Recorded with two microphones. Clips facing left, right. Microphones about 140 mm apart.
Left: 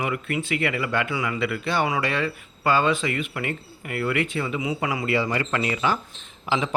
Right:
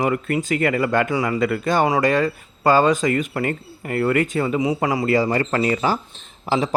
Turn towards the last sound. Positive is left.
turn(degrees=-40)  # may be behind; listen again after turning